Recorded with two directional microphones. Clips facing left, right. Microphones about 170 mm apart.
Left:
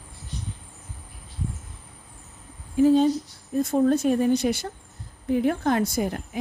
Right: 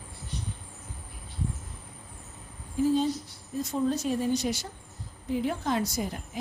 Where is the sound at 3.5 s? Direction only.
55° left (ahead or behind).